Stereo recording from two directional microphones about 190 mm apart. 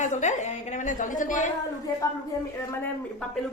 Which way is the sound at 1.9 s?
20° left (ahead or behind).